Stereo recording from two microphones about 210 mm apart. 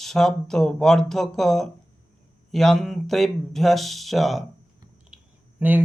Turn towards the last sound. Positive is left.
turn(degrees=-5)  # may be behind; listen again after turning